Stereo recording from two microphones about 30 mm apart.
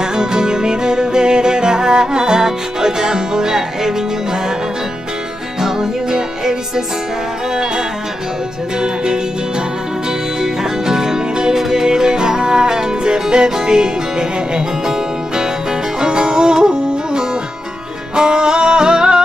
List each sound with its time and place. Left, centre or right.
0.0 s music: right
5.6 s music: right
8.8 s music: right
10.4 s music: centre
16.0 s music: right